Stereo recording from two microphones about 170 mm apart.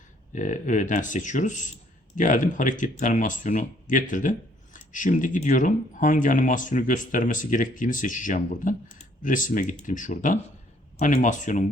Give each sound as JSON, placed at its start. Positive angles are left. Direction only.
{"t": 0.3, "sound": "speech", "side_deg": 45}